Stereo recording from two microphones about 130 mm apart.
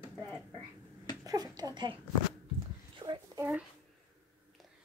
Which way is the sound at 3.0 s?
45° right (ahead or behind).